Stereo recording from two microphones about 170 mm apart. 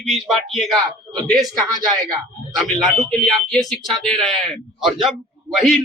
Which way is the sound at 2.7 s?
5° left (ahead or behind).